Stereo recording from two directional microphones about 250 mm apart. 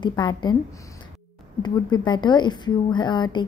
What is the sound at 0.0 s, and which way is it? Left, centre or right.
Speech, centre.